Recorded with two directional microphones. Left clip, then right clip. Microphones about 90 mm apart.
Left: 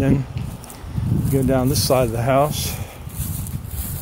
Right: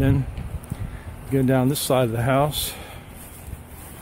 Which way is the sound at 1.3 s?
30° right (ahead or behind).